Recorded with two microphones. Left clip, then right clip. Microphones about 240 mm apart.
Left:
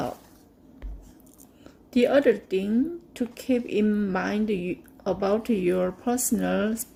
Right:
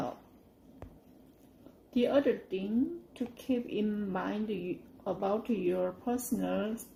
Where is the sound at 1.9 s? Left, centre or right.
Left.